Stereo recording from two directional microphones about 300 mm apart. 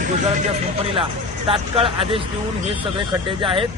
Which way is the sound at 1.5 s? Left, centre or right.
Centre.